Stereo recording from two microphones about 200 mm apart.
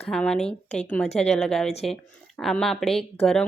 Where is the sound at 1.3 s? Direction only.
5° left (ahead or behind).